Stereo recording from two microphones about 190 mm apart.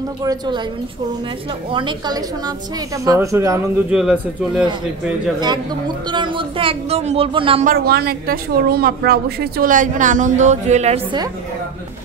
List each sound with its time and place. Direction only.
0.2 s a woman's voice: 20° right (ahead or behind)
1.7 s a woman's voice: 25° right (ahead or behind)
3.9 s speech: 5° right (ahead or behind)
6.0 s a woman's voice: 25° right (ahead or behind)
7.6 s a woman's voice: 55° right (ahead or behind); by 11.0 s 35° right (ahead or behind)